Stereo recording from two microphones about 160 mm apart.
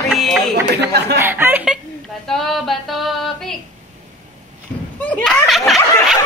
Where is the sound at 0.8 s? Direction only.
90° right.